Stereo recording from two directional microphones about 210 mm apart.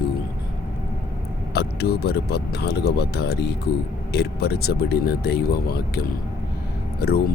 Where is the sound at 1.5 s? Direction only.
50° left (ahead or behind).